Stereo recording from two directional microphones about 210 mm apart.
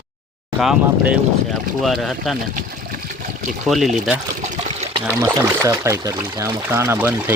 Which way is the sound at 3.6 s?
Centre (ahead or behind).